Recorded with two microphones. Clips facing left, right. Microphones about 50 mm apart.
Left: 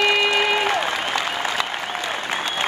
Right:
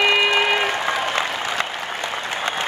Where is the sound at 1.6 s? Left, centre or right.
Right.